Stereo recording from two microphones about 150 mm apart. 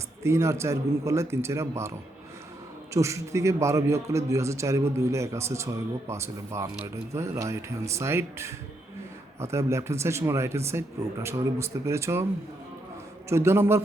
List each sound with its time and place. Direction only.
0.2 s a man's voice: 20° right (ahead or behind)
2.9 s a man's voice: 20° right (ahead or behind)
13.2 s speech: 15° right (ahead or behind)